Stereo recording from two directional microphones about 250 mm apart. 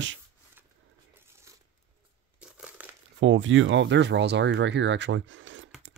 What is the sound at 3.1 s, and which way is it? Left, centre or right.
Speech, right.